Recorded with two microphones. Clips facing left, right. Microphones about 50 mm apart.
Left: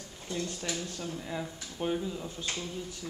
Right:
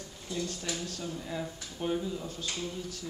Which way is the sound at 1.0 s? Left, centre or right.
Centre.